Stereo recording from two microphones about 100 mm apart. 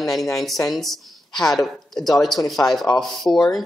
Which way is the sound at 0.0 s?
Centre (ahead or behind).